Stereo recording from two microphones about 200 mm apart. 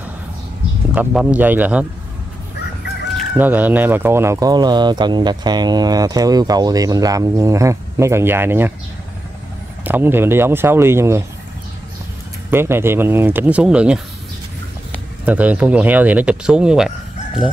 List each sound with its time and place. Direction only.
0.9 s speech: 5° right (ahead or behind)
3.3 s speech: 10° right (ahead or behind)
9.8 s speech: 10° right (ahead or behind)
12.4 s speech: 10° right (ahead or behind)
15.2 s speech: 5° right (ahead or behind)